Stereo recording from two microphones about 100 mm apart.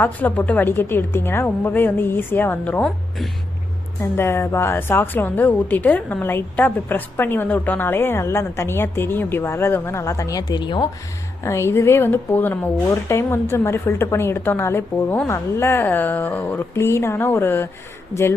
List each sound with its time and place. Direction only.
0.0 s a woman's voice: 20° left (ahead or behind)
4.0 s a woman's voice: 25° left (ahead or behind)
10.5 s speech: 50° left (ahead or behind)
11.4 s a woman's voice: 25° left (ahead or behind)
12.9 s a woman's voice: 30° left (ahead or behind)